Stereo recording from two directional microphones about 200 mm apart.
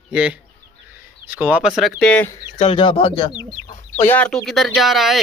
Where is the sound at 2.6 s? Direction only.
25° left (ahead or behind).